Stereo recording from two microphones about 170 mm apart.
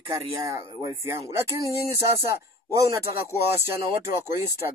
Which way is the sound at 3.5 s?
15° right (ahead or behind).